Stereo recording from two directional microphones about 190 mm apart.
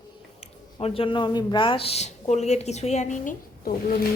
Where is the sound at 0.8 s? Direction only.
30° left (ahead or behind).